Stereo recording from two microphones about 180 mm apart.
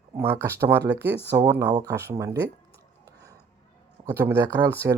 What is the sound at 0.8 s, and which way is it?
Speech, 65° right (ahead or behind).